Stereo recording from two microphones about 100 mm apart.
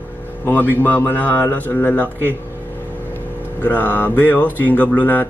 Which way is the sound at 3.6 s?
15° left (ahead or behind).